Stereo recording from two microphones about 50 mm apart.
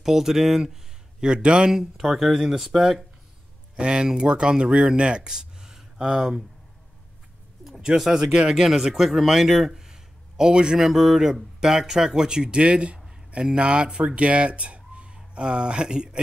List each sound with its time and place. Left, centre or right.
0.0 s speech: centre
1.2 s speech: centre
3.7 s speech: centre
7.6 s speech: centre
10.9 s speech: centre